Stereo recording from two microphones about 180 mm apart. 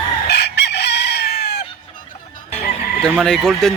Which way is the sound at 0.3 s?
70° left (ahead or behind).